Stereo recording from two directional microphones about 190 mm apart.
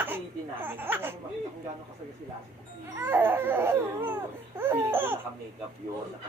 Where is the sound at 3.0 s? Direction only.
10° right (ahead or behind).